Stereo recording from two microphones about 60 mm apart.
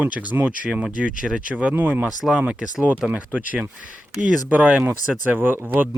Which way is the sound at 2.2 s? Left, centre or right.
Centre.